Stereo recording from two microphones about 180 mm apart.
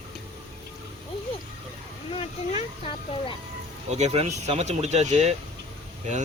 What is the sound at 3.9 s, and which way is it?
Speech, 40° right (ahead or behind).